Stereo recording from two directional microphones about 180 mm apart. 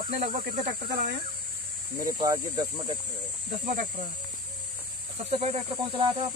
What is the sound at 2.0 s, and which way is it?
Speech, 20° right (ahead or behind).